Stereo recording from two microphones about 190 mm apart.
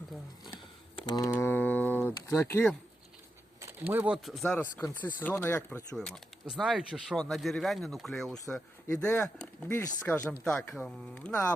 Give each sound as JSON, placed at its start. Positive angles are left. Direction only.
{"t": 0.9, "sound": "typing", "side_deg": 20}
{"t": 1.3, "sound": "mantra", "side_deg": 10}
{"t": 2.0, "sound": "speech", "side_deg": 15}
{"t": 3.6, "sound": "speech", "side_deg": -10}